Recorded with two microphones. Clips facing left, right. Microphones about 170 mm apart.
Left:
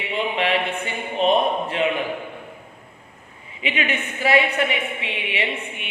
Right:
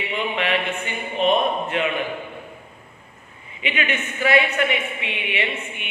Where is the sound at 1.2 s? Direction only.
35° left (ahead or behind).